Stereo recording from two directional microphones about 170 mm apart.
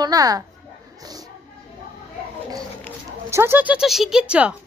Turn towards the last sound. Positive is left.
turn(degrees=-5)  # may be behind; listen again after turning